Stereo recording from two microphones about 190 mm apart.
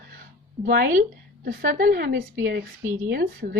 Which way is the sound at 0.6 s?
50° right (ahead or behind).